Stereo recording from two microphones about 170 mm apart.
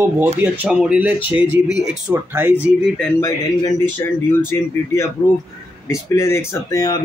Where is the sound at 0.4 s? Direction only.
10° right (ahead or behind).